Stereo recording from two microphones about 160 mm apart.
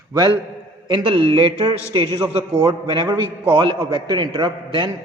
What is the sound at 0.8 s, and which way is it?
A man's voice, 30° right (ahead or behind).